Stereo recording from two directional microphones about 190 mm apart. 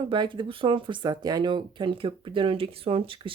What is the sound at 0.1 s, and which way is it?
Speech, 25° right (ahead or behind).